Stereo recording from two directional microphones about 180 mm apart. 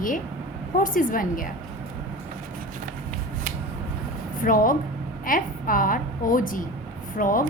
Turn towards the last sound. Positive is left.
turn(degrees=50)  # may be behind; listen again after turning